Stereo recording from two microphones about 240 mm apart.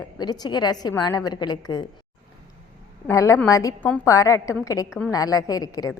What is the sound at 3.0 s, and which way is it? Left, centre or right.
A woman's voice, centre.